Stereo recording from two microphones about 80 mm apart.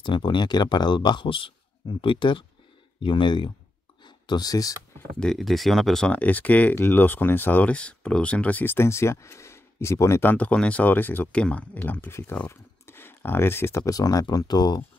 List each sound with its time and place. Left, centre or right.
0.0 s speech: left
4.0 s a sound: left
5.2 s speech: centre
6.0 s speech: centre; by 10.3 s left
10.3 s speech: centre
12.0 s speech: left
13.8 s speech: left